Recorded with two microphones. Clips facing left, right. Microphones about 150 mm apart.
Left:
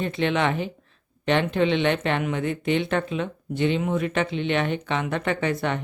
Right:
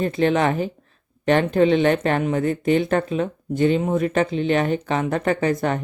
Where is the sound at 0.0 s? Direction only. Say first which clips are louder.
Right 4 dB; 40° right (ahead or behind).